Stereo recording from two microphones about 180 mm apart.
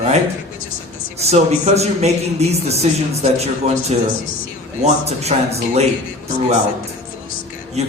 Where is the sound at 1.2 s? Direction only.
35° right (ahead or behind).